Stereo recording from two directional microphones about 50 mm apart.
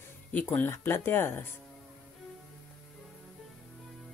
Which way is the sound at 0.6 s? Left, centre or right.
Left.